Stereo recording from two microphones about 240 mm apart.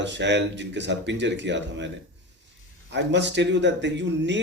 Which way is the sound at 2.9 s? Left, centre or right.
Right.